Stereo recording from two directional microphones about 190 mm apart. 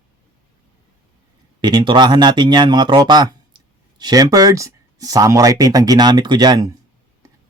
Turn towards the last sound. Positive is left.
turn(degrees=-20)  # may be behind; listen again after turning